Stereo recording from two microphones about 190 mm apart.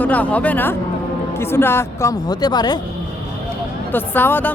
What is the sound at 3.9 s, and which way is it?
Speech, 10° left (ahead or behind).